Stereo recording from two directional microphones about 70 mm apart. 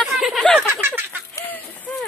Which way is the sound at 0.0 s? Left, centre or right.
Centre.